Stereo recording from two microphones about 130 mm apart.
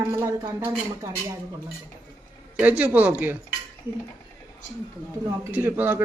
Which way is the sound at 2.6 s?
10° right (ahead or behind).